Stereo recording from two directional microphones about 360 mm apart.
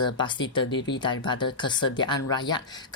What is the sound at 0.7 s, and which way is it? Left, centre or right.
Speech, left.